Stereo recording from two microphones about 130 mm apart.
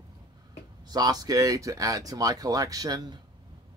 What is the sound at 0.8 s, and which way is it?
Speech, 30° right (ahead or behind).